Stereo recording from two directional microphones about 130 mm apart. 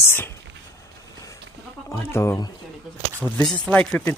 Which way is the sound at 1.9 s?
20° left (ahead or behind).